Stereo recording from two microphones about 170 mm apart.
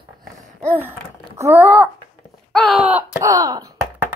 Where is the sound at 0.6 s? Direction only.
10° right (ahead or behind).